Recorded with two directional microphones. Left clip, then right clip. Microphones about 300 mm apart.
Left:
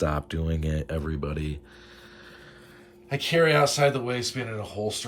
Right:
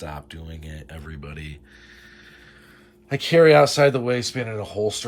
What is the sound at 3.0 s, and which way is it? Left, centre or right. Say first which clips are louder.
Speech: right 7 dB; centre.